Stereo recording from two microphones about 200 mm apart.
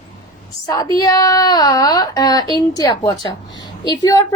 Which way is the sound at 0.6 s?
20° left (ahead or behind).